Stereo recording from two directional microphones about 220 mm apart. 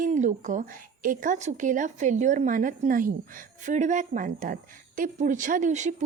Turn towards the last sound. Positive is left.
turn(degrees=-35)  # may be behind; listen again after turning